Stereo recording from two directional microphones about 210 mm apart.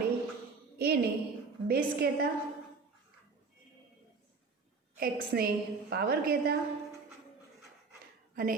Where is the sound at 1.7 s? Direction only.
50° right (ahead or behind).